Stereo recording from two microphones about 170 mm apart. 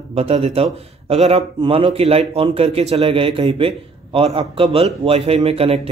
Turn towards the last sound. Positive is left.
turn(degrees=-35)  # may be behind; listen again after turning